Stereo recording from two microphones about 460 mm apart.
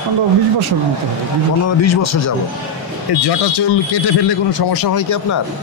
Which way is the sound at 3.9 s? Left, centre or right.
Left.